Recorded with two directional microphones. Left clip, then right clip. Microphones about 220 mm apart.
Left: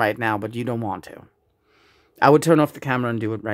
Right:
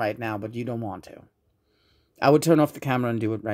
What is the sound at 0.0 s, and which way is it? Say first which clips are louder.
Speech: left 6 dB; 20° left (ahead or behind).